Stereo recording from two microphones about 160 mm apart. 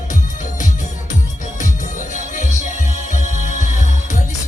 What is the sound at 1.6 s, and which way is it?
Music, 50° left (ahead or behind).